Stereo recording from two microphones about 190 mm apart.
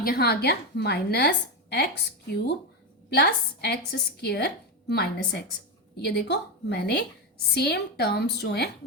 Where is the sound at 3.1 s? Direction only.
55° left (ahead or behind).